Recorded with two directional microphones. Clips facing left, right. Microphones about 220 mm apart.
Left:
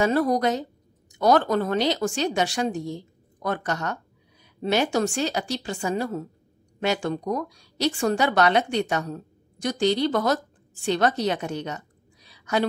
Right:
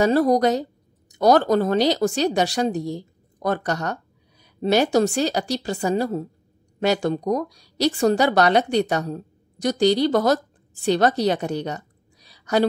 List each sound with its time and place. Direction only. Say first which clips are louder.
0.0 s a woman's voice: right 4 dB; 35° right (ahead or behind)